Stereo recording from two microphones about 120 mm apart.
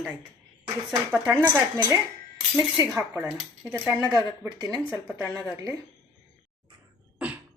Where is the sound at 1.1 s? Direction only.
15° right (ahead or behind).